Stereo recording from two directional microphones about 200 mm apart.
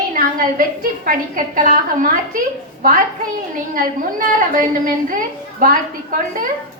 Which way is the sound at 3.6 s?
45° right (ahead or behind).